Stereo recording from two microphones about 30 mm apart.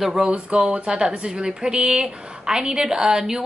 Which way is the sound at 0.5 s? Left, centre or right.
Right.